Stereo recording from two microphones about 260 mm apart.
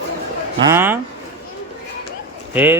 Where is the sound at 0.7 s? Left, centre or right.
Centre.